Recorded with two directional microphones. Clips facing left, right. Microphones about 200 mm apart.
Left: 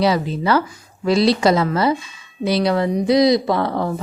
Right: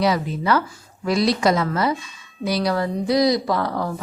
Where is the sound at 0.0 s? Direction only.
30° left (ahead or behind).